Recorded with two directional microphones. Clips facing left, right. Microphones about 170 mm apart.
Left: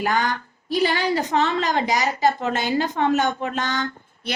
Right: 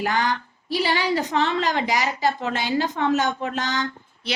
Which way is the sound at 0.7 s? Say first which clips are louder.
Left 2 dB; 50° left (ahead or behind).